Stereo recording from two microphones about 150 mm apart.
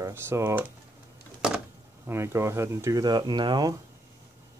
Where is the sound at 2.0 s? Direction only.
15° right (ahead or behind).